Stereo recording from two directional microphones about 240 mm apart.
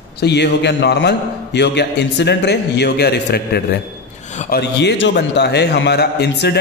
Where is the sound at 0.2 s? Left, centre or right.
Left.